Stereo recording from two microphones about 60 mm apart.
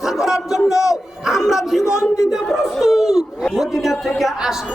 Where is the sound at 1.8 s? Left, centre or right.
Left.